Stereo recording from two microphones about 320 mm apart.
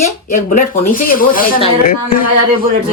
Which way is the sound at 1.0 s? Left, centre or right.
Left.